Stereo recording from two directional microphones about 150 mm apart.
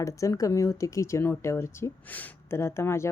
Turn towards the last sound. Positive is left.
turn(degrees=15)  # may be behind; listen again after turning